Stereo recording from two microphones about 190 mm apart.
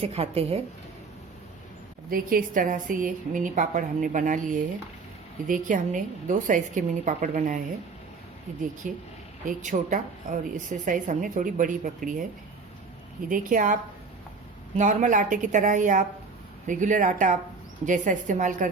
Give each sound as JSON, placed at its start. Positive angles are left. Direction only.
{"t": 0.0, "sound": "speech", "side_deg": -30}
{"t": 2.0, "sound": "a woman's voice", "side_deg": -50}
{"t": 8.8, "sound": "a woman's voice", "side_deg": -45}
{"t": 13.2, "sound": "a woman's voice", "side_deg": -45}
{"t": 14.8, "sound": "speech", "side_deg": -40}